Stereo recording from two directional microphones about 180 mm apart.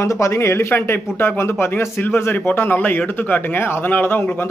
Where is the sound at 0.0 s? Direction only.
15° left (ahead or behind).